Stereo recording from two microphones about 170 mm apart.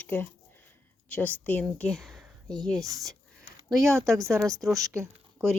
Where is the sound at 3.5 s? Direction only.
25° right (ahead or behind).